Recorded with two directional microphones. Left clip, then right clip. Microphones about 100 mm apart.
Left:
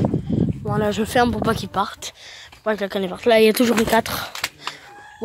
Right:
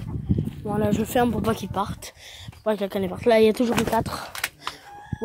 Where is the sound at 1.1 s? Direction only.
10° right (ahead or behind).